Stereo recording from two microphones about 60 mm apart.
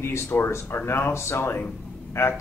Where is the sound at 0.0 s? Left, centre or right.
Left.